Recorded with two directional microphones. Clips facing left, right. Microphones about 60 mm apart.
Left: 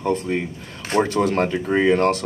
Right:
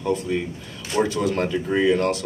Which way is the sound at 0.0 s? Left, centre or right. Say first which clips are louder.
Left 1 dB; left.